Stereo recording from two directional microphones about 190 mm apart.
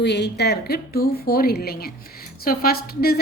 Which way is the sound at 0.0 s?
65° left (ahead or behind).